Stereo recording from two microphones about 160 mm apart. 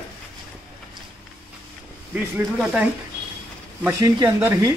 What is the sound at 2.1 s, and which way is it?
Speech, 10° right (ahead or behind).